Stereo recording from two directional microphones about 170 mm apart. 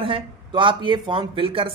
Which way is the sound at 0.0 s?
30° right (ahead or behind).